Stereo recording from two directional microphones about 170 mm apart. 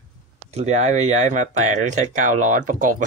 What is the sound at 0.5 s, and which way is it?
Speech, 40° right (ahead or behind).